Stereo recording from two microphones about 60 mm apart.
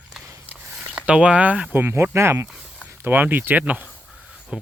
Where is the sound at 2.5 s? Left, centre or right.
Centre.